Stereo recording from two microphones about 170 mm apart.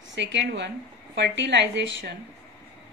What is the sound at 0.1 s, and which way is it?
Speech, 90° right.